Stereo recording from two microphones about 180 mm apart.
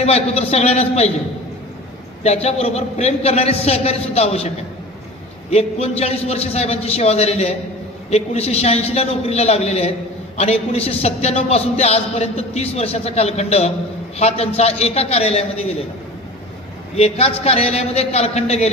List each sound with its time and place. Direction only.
0.0 s a man's voice: 35° left (ahead or behind)
2.2 s a man's voice: 35° left (ahead or behind)
5.5 s a man's voice: 35° left (ahead or behind)
16.9 s a man's voice: 35° left (ahead or behind)